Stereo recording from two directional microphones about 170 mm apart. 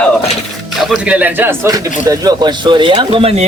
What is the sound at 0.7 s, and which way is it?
Speech, centre (ahead or behind).